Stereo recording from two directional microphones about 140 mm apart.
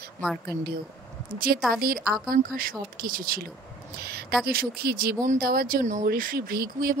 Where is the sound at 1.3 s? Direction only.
90° right.